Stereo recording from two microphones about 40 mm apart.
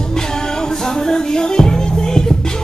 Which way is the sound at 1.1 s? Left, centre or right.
Centre.